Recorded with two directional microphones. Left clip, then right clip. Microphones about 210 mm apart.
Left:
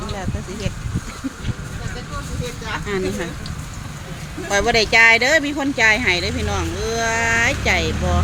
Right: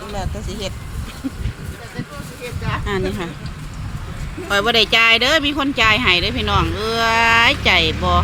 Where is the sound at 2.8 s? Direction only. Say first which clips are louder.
Even; 10° right (ahead or behind).